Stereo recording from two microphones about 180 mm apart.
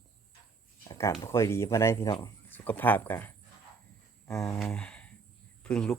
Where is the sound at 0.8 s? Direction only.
20° left (ahead or behind).